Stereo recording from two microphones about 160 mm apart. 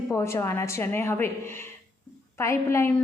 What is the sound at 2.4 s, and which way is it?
Speech, 15° left (ahead or behind).